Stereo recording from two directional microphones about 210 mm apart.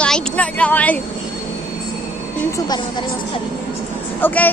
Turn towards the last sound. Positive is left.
turn(degrees=10)  # may be behind; listen again after turning